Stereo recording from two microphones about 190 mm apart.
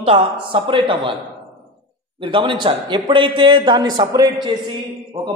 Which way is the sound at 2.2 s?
25° right (ahead or behind).